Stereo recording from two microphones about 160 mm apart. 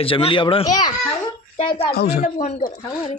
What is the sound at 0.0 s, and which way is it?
Speech, 35° left (ahead or behind).